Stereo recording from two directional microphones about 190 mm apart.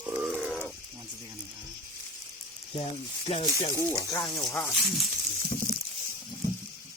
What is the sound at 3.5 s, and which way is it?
Speech, 15° right (ahead or behind).